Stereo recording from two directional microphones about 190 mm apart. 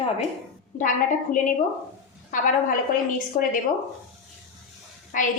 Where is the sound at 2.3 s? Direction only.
45° left (ahead or behind).